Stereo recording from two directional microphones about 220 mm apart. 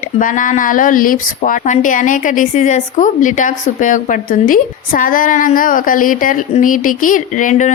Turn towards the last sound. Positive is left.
turn(degrees=35)  # may be behind; listen again after turning